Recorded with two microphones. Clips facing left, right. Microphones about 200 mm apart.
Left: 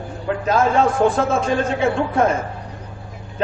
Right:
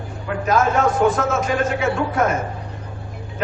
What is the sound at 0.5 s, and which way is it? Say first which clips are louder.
A man's voice: left 1 dB; 30° left (ahead or behind).